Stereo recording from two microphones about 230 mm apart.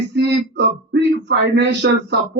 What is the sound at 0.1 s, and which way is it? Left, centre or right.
Speech, right.